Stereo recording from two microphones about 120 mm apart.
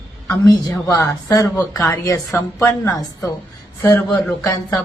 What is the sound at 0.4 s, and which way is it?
Speech, 30° left (ahead or behind).